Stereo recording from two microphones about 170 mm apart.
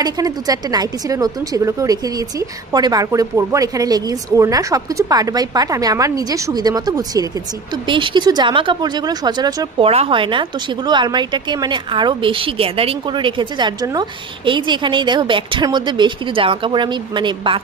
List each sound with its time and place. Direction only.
0.0 s a woman's voice: 20° right (ahead or behind)